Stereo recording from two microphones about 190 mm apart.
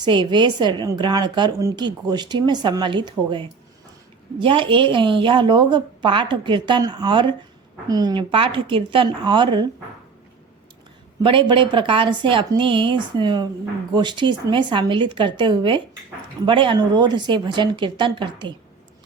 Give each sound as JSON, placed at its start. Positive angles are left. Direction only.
{"t": 0.0, "sound": "a woman's voice", "side_deg": -25}
{"t": 11.2, "sound": "a woman's voice", "side_deg": -25}